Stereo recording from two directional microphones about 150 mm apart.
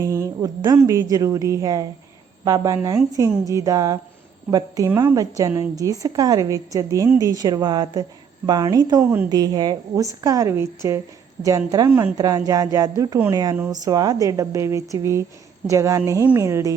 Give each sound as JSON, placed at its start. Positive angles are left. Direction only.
{"t": 0.0, "sound": "a woman's voice", "side_deg": -20}